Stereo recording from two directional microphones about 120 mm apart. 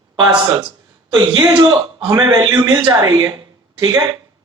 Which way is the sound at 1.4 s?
35° right (ahead or behind).